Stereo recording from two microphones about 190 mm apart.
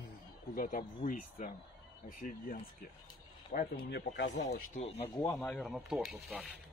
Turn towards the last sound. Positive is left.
turn(degrees=0)  # may be behind; listen again after turning